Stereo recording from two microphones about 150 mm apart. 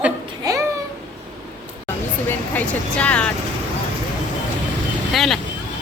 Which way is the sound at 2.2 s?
10° left (ahead or behind).